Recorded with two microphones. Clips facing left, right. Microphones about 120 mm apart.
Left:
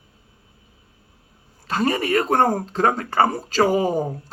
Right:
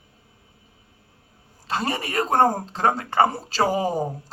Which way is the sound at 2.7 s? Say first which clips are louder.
Left 2 dB; 30° right (ahead or behind).